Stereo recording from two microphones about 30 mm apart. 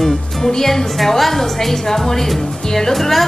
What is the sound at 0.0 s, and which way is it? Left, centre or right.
A woman's voice, centre.